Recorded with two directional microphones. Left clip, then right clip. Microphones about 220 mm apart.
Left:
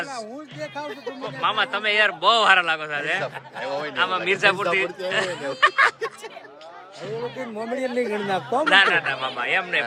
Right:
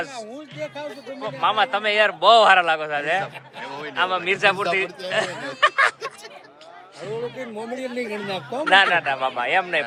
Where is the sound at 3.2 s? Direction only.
55° left (ahead or behind).